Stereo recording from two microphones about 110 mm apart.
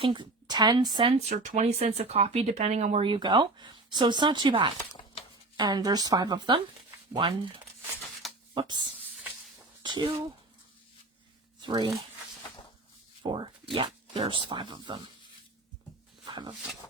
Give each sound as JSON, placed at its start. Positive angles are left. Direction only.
{"t": 0.0, "sound": "a woman's voice", "side_deg": -45}
{"t": 1.2, "sound": "speech", "side_deg": -90}
{"t": 3.0, "sound": "speech", "side_deg": -45}
{"t": 8.6, "sound": "speech", "side_deg": -45}
{"t": 9.8, "sound": "a sound", "side_deg": -45}
{"t": 11.6, "sound": "speech", "side_deg": -45}
{"t": 13.2, "sound": "speech", "side_deg": -50}
{"t": 16.2, "sound": "a sound", "side_deg": -45}